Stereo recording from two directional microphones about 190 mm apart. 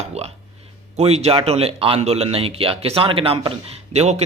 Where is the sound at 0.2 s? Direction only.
35° right (ahead or behind).